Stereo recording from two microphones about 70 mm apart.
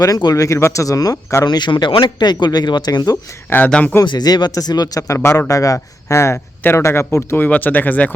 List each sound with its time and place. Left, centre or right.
0.0 s speech: left
0.3 s speech: left
1.5 s speech: left
3.7 s speech: centre
4.0 s speech: left
5.0 s a man's voice: left
6.1 s speech: left